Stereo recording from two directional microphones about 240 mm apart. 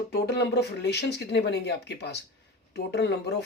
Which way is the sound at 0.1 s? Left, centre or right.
Left.